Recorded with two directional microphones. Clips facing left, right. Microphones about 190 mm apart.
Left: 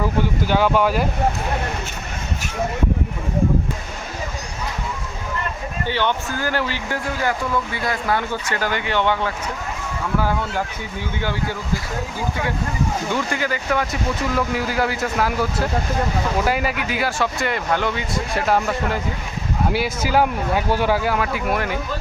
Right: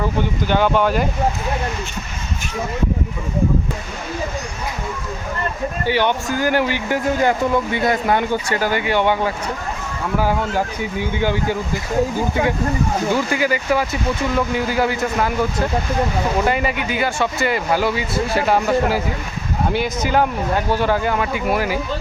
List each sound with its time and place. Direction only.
0.4 s speech: 5° left (ahead or behind)
5.8 s speech: 10° right (ahead or behind)
11.1 s speech: 15° right (ahead or behind)
13.1 s speech: 5° right (ahead or behind)